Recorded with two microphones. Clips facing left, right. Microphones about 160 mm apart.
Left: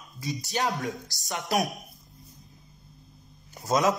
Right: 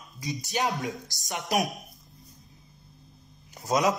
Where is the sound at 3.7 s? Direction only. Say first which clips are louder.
Left 1 dB; 15° right (ahead or behind).